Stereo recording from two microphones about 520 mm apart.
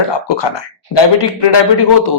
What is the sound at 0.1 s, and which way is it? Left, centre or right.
Speech, left.